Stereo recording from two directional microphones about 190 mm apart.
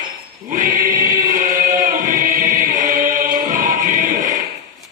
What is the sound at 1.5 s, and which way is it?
Music, 45° right (ahead or behind).